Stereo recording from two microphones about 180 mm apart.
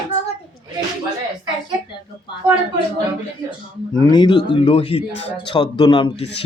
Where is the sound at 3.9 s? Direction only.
25° left (ahead or behind).